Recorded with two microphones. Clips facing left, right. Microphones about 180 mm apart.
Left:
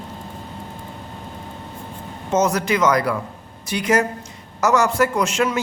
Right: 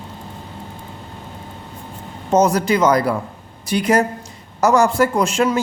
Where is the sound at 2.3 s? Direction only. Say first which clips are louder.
Right 4 dB; 35° right (ahead or behind).